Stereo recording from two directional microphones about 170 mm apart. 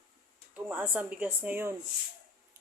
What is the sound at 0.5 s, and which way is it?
Speech, 10° right (ahead or behind).